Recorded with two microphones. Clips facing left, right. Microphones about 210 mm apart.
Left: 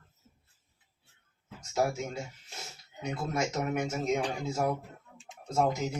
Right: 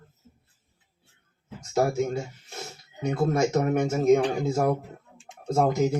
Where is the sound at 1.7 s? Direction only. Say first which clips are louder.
Right 6 dB; 50° right (ahead or behind).